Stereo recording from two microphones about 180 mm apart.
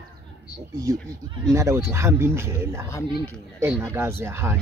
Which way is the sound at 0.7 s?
20° right (ahead or behind).